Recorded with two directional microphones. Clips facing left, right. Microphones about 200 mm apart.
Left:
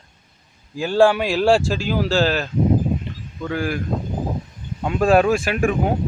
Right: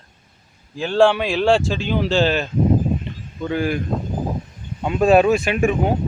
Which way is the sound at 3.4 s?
15° right (ahead or behind).